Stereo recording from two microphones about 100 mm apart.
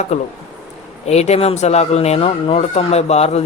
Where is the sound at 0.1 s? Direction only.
90° left.